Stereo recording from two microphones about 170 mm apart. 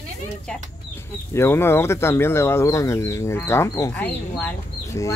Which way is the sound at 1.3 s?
15° left (ahead or behind).